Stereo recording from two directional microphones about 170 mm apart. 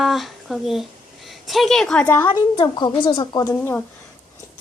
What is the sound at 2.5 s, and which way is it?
A child's voice, 25° left (ahead or behind).